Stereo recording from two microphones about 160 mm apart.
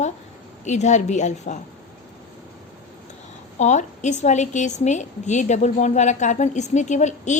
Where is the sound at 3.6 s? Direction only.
45° left (ahead or behind).